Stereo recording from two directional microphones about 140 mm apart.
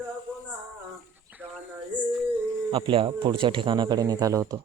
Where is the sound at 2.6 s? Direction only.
35° right (ahead or behind).